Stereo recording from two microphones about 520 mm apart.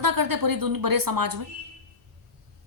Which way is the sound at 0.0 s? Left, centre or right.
Right.